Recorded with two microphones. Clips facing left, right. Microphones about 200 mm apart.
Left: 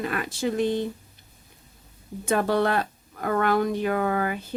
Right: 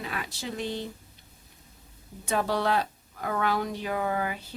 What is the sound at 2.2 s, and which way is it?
Speech, 55° left (ahead or behind).